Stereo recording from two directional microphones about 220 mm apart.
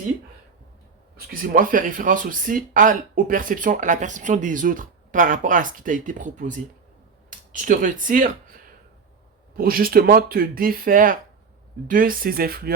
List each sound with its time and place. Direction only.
1.1 s speech: 40° right (ahead or behind)